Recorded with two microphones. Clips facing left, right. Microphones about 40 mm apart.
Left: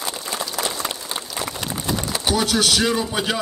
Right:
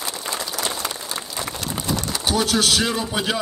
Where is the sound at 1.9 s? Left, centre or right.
Left.